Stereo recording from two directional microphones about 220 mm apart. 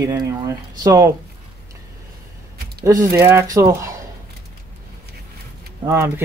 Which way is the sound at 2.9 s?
15° right (ahead or behind).